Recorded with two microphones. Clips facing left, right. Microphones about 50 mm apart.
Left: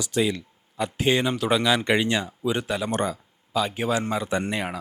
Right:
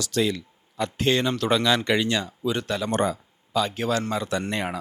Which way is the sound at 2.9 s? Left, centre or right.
Centre.